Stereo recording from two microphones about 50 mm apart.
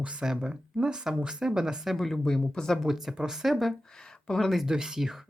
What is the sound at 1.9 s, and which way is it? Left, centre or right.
Speech, centre.